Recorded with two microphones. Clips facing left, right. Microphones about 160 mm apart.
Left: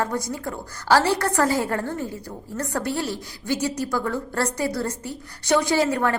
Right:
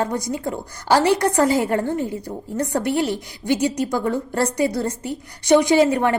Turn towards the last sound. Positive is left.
turn(degrees=-20)  # may be behind; listen again after turning